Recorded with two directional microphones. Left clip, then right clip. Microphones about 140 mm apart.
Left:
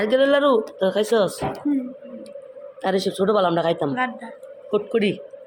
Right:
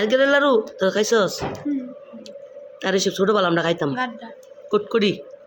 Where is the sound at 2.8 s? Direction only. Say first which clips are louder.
Right 1 dB; 20° right (ahead or behind).